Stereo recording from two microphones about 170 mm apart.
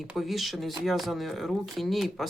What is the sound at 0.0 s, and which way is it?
Speech, centre (ahead or behind).